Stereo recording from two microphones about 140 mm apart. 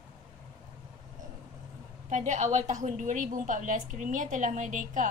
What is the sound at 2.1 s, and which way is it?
A woman's voice, 60° right (ahead or behind).